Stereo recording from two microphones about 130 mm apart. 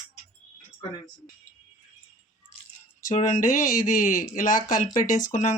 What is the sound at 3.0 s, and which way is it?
Speech, 75° left (ahead or behind).